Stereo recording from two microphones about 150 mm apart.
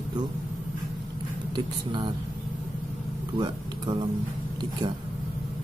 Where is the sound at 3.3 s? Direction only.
30° right (ahead or behind).